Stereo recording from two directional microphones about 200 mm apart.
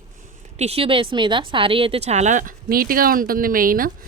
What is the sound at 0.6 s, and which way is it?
A woman's voice, 30° right (ahead or behind).